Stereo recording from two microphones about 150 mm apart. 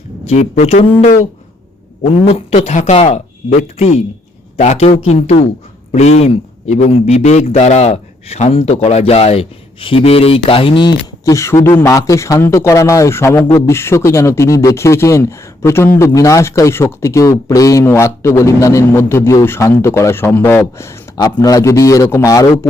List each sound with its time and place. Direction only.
0.3 s speech: 45° left (ahead or behind)
2.2 s speech: 45° left (ahead or behind); by 22.4 s 20° left (ahead or behind)